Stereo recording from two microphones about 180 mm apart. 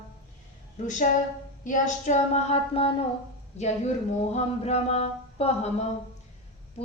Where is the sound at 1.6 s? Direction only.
45° left (ahead or behind).